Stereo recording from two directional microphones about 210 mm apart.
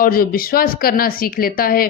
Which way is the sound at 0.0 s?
45° left (ahead or behind).